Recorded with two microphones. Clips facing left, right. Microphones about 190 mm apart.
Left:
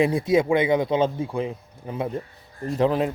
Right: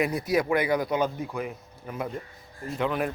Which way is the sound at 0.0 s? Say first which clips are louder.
Left 5 dB; 25° left (ahead or behind).